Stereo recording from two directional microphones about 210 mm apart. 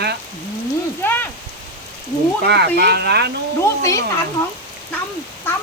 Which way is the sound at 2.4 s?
50° right (ahead or behind).